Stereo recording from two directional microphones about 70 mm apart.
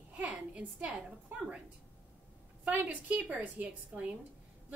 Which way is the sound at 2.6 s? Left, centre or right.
Centre.